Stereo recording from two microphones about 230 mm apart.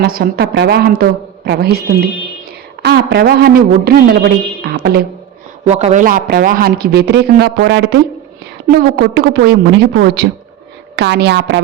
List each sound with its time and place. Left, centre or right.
0.0 s a man's voice: right
5.6 s a man's voice: right